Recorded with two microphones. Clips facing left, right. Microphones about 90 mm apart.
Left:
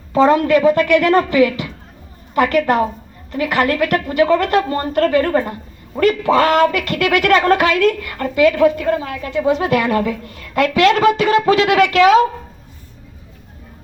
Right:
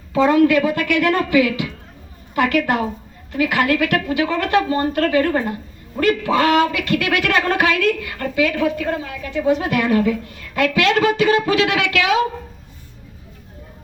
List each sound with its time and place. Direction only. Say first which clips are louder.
0.1 s speech: left 2 dB; 40° left (ahead or behind)